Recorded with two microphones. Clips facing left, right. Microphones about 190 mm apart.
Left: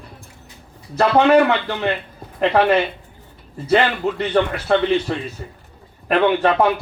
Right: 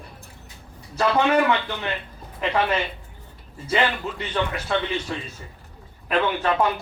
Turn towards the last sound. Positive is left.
turn(degrees=65)  # may be behind; listen again after turning